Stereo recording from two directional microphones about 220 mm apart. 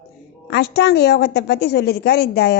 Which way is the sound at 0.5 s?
50° left (ahead or behind).